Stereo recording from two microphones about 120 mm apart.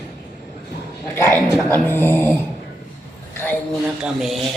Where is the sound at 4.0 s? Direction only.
5° right (ahead or behind).